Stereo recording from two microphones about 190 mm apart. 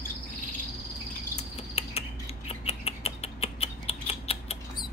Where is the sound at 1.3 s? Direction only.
35° left (ahead or behind).